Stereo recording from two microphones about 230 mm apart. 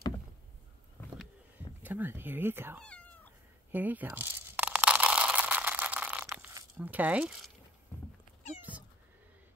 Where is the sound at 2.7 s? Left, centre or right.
Centre.